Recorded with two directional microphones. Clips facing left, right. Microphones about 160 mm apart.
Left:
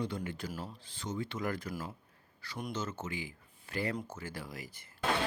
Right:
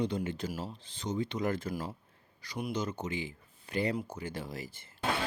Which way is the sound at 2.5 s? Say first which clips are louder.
Right 4 dB; 15° right (ahead or behind).